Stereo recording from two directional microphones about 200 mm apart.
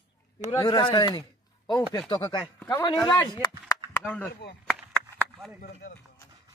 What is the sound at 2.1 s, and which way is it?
Chopping, 20° left (ahead or behind).